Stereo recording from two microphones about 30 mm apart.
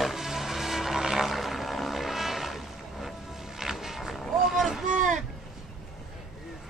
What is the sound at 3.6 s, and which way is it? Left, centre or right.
Vehicle, centre.